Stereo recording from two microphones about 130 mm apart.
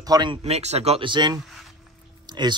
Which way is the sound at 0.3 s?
55° right (ahead or behind).